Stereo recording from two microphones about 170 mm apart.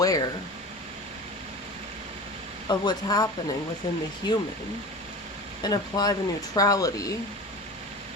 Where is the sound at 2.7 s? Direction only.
25° left (ahead or behind).